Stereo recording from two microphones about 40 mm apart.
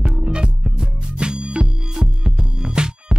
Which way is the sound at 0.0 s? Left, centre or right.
Right.